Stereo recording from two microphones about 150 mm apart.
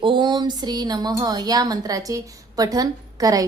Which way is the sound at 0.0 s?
30° right (ahead or behind).